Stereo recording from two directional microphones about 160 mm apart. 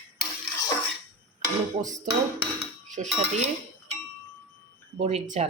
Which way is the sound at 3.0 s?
45° right (ahead or behind).